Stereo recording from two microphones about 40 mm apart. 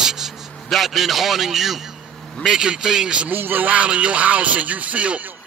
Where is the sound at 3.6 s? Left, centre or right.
Right.